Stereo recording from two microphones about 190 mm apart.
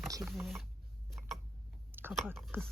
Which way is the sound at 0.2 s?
Centre (ahead or behind).